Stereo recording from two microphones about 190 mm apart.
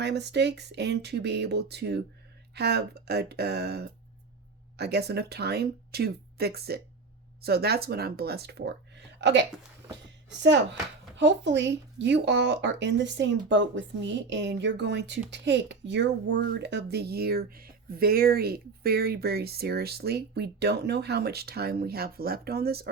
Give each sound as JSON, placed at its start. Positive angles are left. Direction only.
{"t": 0.0, "sound": "speech", "side_deg": -65}
{"t": 11.2, "sound": "speech", "side_deg": -70}